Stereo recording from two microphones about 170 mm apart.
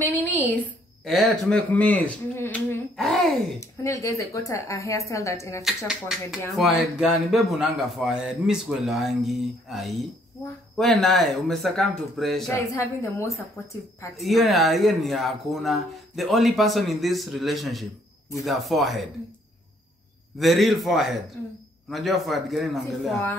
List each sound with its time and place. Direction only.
0.0 s a sound: 10° left (ahead or behind)
1.0 s speech: centre (ahead or behind)
3.0 s speech: centre (ahead or behind)
3.5 s speech: 20° left (ahead or behind)
5.9 s speech: centre (ahead or behind)
12.7 s speech: 15° left (ahead or behind)
13.6 s speech: 5° left (ahead or behind)
20.3 s speech: centre (ahead or behind)